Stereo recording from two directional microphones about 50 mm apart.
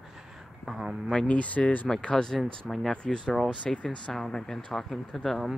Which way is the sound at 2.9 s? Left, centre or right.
Centre.